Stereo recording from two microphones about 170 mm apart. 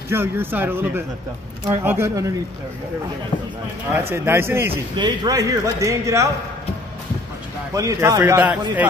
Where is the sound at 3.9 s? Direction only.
10° right (ahead or behind).